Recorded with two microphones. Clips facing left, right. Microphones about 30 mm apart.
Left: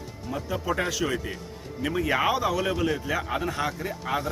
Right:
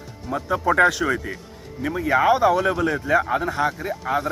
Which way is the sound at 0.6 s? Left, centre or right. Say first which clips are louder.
Right 12 dB; right.